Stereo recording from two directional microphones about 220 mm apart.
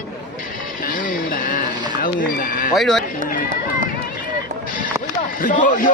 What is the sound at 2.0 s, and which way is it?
Speech, 40° left (ahead or behind).